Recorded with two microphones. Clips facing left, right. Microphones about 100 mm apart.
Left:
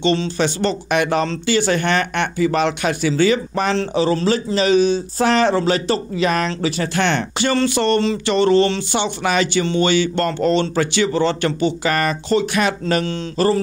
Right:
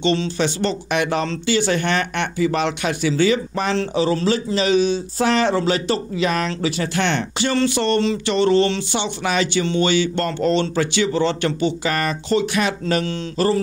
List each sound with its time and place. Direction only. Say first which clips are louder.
0.0 s speech: left 1 dB; 40° left (ahead or behind)
3.7 s speech: even; 35° left (ahead or behind)